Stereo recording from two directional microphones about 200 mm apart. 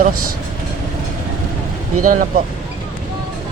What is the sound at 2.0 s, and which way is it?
Speech, 40° right (ahead or behind).